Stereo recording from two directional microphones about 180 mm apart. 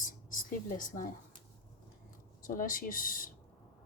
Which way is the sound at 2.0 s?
50° left (ahead or behind).